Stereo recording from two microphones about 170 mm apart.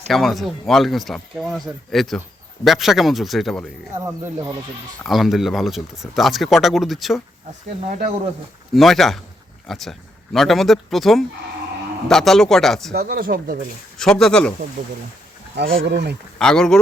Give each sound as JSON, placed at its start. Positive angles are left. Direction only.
{"t": 0.1, "sound": "speech", "side_deg": 0}
{"t": 4.0, "sound": "speech", "side_deg": -20}
{"t": 5.0, "sound": "speech", "side_deg": 0}
{"t": 8.7, "sound": "speech", "side_deg": 0}
{"t": 12.9, "sound": "speech", "side_deg": -65}
{"t": 14.0, "sound": "speech", "side_deg": 5}
{"t": 15.8, "sound": "speech", "side_deg": -85}
{"t": 16.4, "sound": "speech", "side_deg": 5}